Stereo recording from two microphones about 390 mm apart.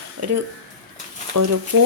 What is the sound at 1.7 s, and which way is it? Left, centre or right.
Speech, right.